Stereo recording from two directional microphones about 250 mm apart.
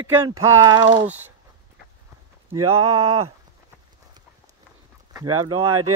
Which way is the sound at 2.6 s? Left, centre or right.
Right.